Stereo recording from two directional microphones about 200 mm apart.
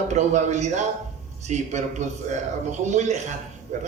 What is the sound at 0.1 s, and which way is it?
A man's voice, 35° right (ahead or behind).